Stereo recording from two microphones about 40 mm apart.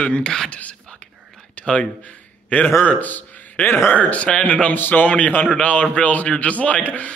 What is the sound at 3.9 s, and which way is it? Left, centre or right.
Speech, left.